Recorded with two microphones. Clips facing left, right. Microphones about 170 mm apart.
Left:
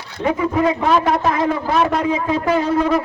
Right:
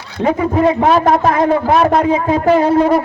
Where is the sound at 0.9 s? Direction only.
40° right (ahead or behind).